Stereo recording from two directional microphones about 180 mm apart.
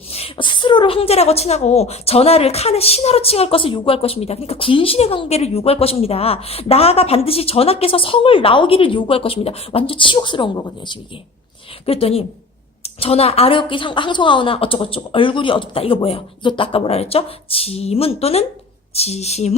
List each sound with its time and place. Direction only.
0.1 s speech: 35° left (ahead or behind)